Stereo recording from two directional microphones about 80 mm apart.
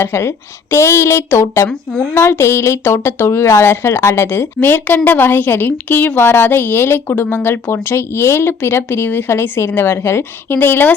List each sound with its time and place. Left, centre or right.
0.0 s speech: left
1.7 s speech: centre
2.1 s a woman's voice: left